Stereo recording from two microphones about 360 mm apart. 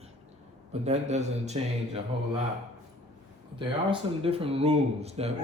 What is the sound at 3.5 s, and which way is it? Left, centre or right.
Speech, centre.